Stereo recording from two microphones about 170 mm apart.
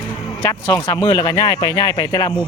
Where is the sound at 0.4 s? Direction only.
25° left (ahead or behind).